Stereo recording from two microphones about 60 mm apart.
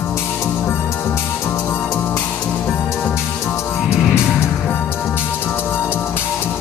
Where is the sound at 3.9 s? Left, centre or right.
Left.